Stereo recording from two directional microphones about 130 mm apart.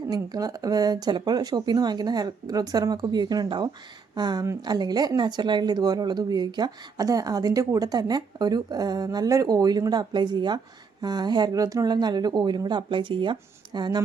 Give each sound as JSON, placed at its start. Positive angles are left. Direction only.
{"t": 0.1, "sound": "speech", "side_deg": -30}